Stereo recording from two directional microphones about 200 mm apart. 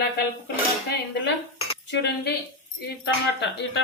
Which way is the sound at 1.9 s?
60° left (ahead or behind).